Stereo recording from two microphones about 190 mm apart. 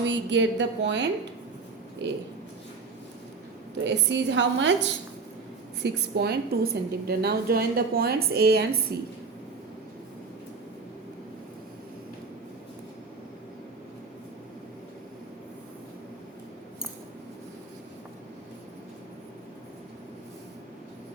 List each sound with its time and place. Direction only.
0.0 s a woman's voice: 70° right (ahead or behind)
3.8 s a woman's voice: 70° right (ahead or behind)
5.8 s a woman's voice: 60° right (ahead or behind)